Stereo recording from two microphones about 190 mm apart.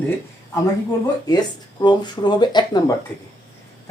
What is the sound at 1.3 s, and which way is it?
Speech, 20° left (ahead or behind).